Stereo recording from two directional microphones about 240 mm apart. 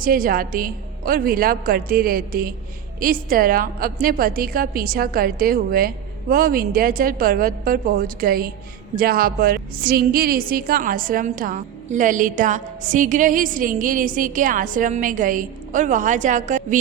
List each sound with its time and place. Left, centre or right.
0.0 s a woman's voice: right